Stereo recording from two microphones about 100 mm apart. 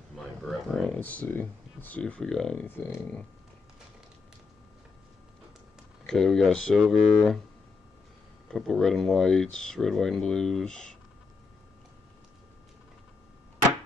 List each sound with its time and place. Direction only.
0.1 s a sound: centre (ahead or behind)
0.9 s speech: 15° left (ahead or behind)
2.6 s speech: 20° left (ahead or behind)
6.0 s speech: 5° left (ahead or behind)
8.5 s speech: 5° left (ahead or behind)